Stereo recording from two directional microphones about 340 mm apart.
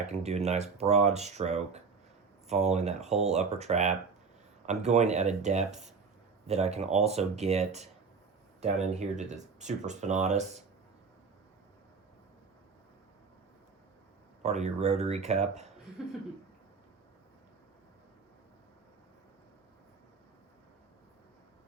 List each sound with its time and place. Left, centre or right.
0.0 s speech: centre
14.4 s speech: centre